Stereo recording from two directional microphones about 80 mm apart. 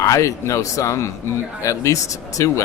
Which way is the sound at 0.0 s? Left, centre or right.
Left.